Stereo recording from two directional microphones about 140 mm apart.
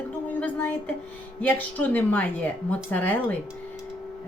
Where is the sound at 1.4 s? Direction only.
10° left (ahead or behind).